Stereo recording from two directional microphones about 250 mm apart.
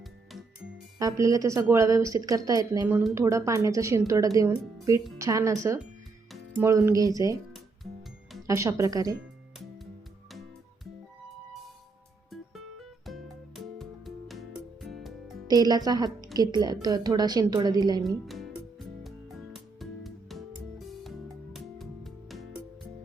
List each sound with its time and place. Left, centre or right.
0.9 s a woman's voice: centre
8.4 s a woman's voice: centre
12.3 s music: centre
15.4 s a woman's voice: centre
18.0 s music: centre